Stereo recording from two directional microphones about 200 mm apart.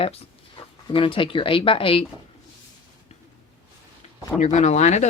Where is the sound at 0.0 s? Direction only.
25° left (ahead or behind).